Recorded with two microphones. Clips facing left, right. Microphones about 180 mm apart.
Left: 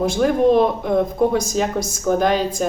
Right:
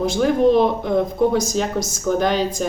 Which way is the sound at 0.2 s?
Centre (ahead or behind).